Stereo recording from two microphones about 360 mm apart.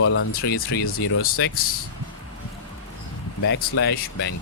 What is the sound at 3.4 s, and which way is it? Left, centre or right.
Speech, left.